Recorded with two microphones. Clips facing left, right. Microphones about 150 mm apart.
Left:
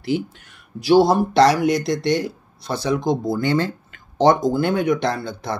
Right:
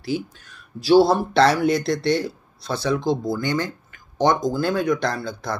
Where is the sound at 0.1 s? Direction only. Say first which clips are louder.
Left 3 dB; 25° left (ahead or behind).